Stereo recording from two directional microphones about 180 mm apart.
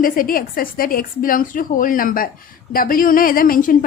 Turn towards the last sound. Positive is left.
turn(degrees=50)  # may be behind; listen again after turning